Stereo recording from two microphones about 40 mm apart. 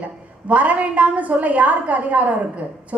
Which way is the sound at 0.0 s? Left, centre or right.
Right.